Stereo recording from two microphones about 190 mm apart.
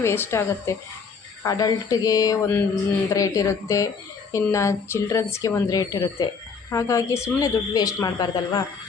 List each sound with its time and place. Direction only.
0.0 s speech: 15° left (ahead or behind)